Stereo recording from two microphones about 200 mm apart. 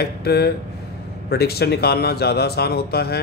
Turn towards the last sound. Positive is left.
turn(degrees=55)  # may be behind; listen again after turning